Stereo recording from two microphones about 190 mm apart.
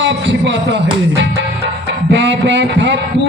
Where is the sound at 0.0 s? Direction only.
65° right (ahead or behind).